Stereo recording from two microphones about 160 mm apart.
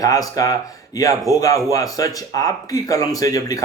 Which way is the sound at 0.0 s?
20° left (ahead or behind).